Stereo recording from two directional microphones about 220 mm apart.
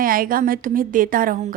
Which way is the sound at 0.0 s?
40° right (ahead or behind).